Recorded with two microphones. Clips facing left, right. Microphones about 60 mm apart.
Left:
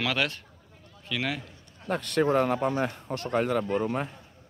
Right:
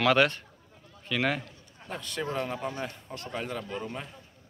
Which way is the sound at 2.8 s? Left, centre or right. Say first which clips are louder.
Left 7 dB; left.